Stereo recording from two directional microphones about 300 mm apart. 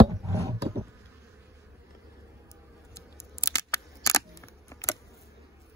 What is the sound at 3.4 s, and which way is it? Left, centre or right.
Camera, centre.